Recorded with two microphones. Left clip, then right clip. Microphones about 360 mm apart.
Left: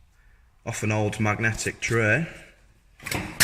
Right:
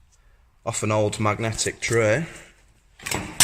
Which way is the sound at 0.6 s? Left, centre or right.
Centre.